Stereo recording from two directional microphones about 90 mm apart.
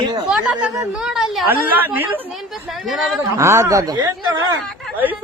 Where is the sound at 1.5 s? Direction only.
20° right (ahead or behind).